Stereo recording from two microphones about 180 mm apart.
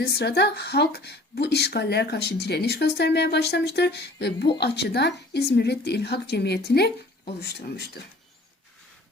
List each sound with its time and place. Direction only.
0.0 s speech: 70° left (ahead or behind)